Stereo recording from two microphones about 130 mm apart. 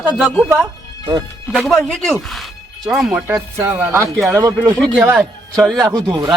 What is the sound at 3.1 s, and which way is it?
Speech, 15° right (ahead or behind).